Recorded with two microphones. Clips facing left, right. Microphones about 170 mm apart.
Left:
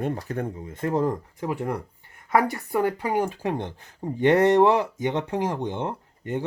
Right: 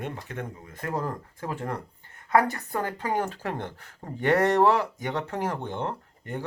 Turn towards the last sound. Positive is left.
turn(degrees=20)  # may be behind; listen again after turning